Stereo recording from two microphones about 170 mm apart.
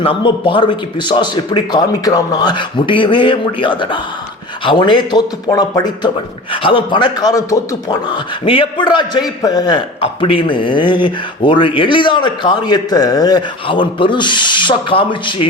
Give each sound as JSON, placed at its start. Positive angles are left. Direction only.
{"t": 0.0, "sound": "speech", "side_deg": 30}